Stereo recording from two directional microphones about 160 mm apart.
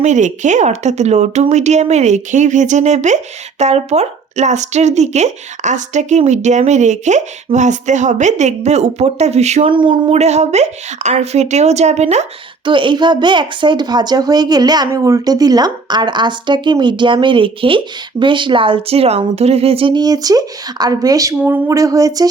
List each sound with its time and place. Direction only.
0.0 s speech: 50° right (ahead or behind)
9.7 s speech: 30° right (ahead or behind)
12.6 s speech: 30° right (ahead or behind)